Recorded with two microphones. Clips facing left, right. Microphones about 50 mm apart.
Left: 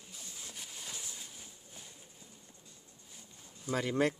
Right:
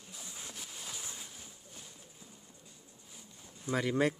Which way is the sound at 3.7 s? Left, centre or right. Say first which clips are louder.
Right 1 dB; right.